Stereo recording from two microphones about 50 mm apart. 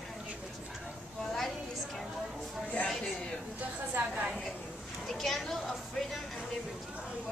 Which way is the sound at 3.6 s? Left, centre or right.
Right.